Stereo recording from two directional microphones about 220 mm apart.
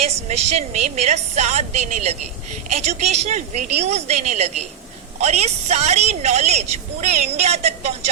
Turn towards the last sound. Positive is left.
turn(degrees=-30)  # may be behind; listen again after turning